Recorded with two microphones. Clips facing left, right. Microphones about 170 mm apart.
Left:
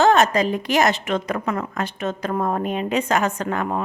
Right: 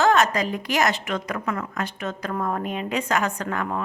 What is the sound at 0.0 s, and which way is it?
A woman's voice, 25° left (ahead or behind).